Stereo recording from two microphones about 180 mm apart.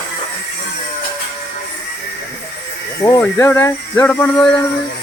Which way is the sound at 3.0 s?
15° left (ahead or behind).